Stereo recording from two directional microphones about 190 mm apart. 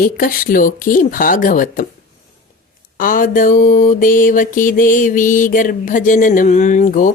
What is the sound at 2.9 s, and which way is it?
Mantra, 45° left (ahead or behind).